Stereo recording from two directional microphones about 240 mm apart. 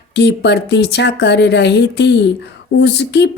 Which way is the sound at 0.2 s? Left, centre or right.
Left.